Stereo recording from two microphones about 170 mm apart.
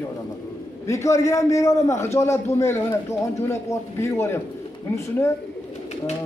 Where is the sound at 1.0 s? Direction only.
20° left (ahead or behind).